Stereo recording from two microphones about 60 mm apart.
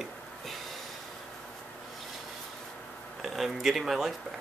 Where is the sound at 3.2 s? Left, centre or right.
Centre.